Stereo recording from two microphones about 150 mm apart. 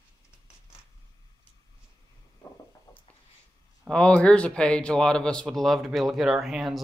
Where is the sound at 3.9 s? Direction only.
5° left (ahead or behind).